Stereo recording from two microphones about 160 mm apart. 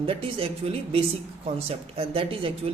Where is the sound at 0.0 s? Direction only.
35° right (ahead or behind).